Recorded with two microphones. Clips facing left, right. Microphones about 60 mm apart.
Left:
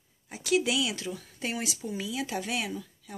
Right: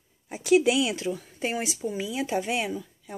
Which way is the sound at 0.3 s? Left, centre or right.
Right.